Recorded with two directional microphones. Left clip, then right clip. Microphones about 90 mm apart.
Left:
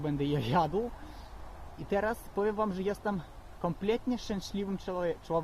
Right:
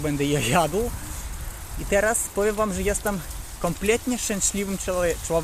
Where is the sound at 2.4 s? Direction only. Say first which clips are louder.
Right 7 dB; 25° left (ahead or behind).